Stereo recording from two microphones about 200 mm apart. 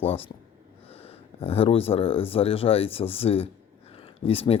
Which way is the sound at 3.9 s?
30° left (ahead or behind).